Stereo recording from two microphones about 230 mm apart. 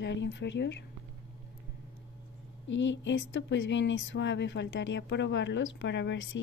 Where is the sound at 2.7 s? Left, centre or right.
Left.